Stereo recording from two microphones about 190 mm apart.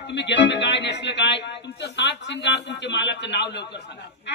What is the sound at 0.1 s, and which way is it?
A man's voice, 70° left (ahead or behind).